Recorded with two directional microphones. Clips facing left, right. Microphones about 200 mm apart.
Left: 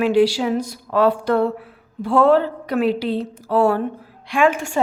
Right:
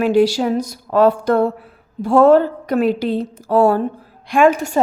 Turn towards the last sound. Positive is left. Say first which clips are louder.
# right 4 dB
turn(degrees=-40)  # may be behind; listen again after turning